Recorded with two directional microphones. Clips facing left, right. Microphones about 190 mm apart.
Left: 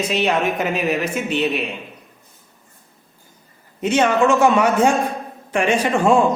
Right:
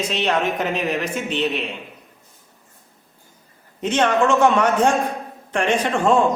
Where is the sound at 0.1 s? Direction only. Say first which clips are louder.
Left 2 dB; 10° left (ahead or behind).